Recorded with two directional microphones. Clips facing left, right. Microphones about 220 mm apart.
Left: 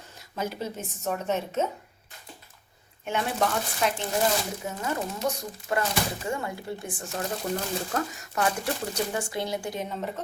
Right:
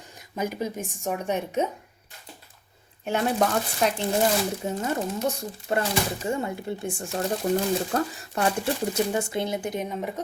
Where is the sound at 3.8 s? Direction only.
40° right (ahead or behind).